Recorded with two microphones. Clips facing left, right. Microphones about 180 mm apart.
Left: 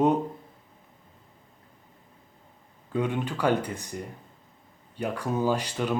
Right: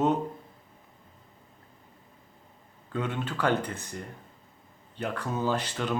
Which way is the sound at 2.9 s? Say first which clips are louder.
Left 4 dB; 15° left (ahead or behind).